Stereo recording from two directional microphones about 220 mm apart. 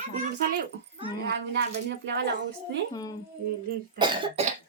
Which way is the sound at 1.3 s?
50° right (ahead or behind).